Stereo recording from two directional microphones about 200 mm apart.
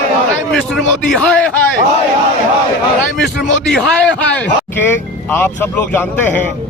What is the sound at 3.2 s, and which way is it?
A man's voice, 5° left (ahead or behind).